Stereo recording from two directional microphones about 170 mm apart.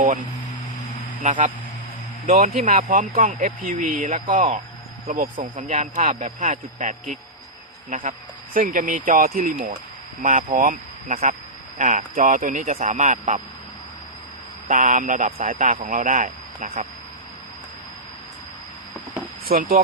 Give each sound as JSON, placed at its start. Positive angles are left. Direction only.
{"t": 1.2, "sound": "speech", "side_deg": -50}
{"t": 14.7, "sound": "speech", "side_deg": -55}
{"t": 19.5, "sound": "speech", "side_deg": -60}